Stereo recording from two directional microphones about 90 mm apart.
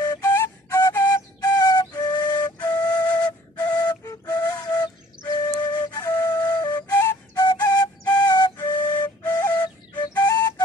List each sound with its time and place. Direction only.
0.0 s flute: 45° left (ahead or behind)
0.7 s flute: 35° left (ahead or behind); by 9.5 s 50° left (ahead or behind)
9.9 s whistle: 50° left (ahead or behind)